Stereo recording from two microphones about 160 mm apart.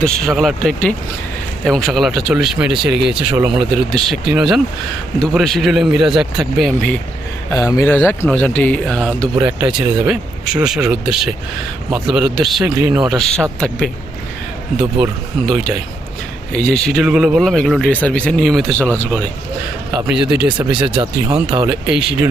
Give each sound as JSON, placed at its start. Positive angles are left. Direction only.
{"t": 0.0, "sound": "speech", "side_deg": 0}
{"t": 7.5, "sound": "speech", "side_deg": 20}
{"t": 20.1, "sound": "speech", "side_deg": -5}
{"t": 20.9, "sound": "speech", "side_deg": -35}
{"t": 21.7, "sound": "speech", "side_deg": -5}